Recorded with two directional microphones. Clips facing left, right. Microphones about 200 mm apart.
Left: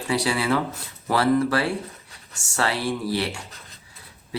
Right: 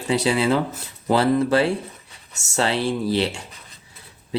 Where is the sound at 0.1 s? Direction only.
20° right (ahead or behind).